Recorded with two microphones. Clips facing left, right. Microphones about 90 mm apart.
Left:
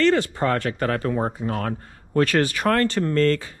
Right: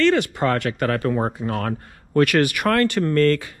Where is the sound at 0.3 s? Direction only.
70° right (ahead or behind).